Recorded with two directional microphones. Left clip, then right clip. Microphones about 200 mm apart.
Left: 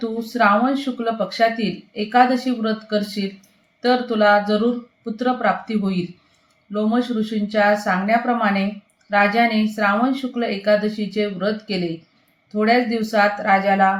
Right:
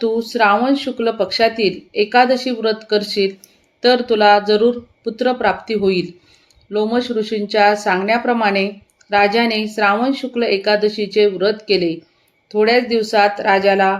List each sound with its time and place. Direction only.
0.0 s speech: 50° right (ahead or behind)